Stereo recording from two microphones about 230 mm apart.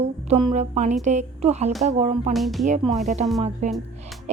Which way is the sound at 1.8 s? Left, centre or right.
Right.